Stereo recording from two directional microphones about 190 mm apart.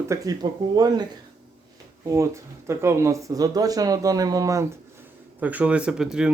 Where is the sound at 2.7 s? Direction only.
15° right (ahead or behind).